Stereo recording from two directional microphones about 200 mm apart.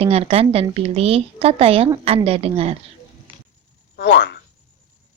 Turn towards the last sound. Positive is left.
turn(degrees=60)  # may be behind; listen again after turning